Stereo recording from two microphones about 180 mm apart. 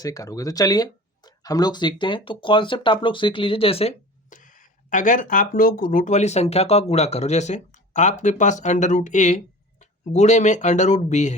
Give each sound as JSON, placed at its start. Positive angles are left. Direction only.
{"t": 0.0, "sound": "speech", "side_deg": 20}